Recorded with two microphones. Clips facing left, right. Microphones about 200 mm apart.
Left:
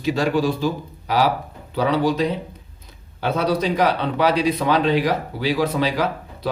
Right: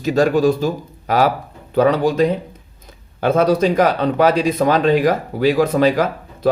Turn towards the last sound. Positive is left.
turn(degrees=-45)  # may be behind; listen again after turning